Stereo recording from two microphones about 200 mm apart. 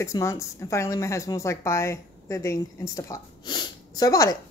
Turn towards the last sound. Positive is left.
turn(degrees=20)  # may be behind; listen again after turning